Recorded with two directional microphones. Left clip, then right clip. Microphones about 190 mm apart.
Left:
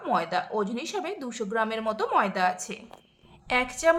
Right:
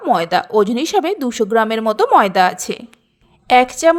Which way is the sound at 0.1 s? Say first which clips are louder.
Right 12 dB; 40° right (ahead or behind).